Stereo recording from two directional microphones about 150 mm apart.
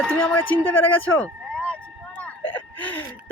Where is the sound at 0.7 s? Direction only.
10° left (ahead or behind).